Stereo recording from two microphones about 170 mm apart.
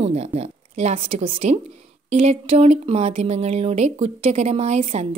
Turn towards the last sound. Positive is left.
turn(degrees=-40)  # may be behind; listen again after turning